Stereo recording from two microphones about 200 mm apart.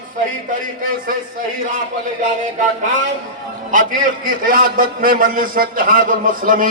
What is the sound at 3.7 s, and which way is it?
A man's voice, 45° right (ahead or behind).